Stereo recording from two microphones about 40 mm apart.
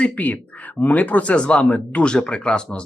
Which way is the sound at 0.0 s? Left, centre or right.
Left.